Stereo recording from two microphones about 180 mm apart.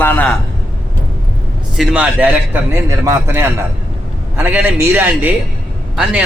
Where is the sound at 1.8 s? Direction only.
5° right (ahead or behind).